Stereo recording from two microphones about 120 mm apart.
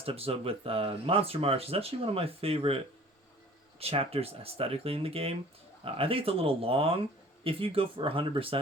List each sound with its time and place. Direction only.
0.0 s speech: 55° right (ahead or behind)